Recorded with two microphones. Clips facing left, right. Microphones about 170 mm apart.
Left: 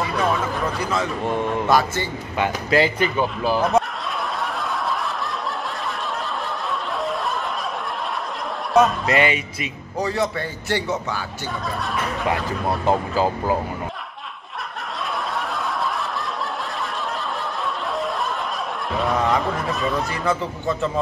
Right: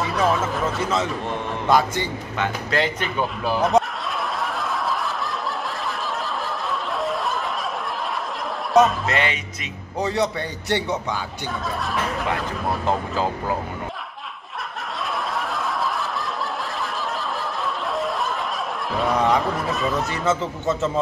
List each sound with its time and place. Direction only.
0.0 s a sound: centre (ahead or behind)
1.7 s a man's voice: 20° right (ahead or behind)
2.3 s speech: 10° left (ahead or behind)
8.7 s speech: centre (ahead or behind)
10.0 s a man's voice: 20° right (ahead or behind)
11.8 s speech: centre (ahead or behind)
18.9 s speech: centre (ahead or behind)
20.2 s a man's voice: 20° right (ahead or behind)